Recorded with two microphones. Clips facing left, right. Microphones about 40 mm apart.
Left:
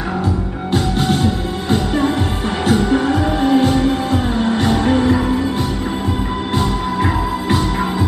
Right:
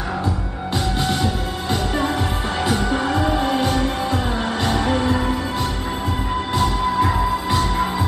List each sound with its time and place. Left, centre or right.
0.9 s music: left
4.8 s music: left
6.5 s music: left